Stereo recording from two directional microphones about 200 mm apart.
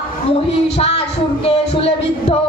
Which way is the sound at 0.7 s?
30° left (ahead or behind).